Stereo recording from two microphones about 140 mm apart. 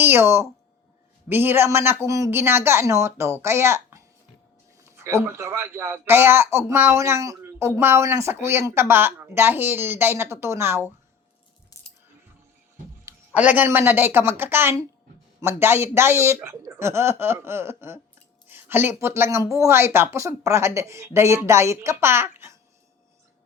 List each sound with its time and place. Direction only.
0.0 s speech: 15° right (ahead or behind)
11.7 s music: 25° left (ahead or behind)
13.3 s speech: 10° right (ahead or behind)